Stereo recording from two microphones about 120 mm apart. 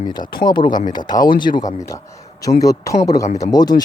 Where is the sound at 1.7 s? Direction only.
30° left (ahead or behind).